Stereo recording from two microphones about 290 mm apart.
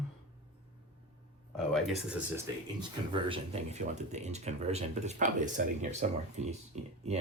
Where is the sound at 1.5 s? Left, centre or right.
Centre.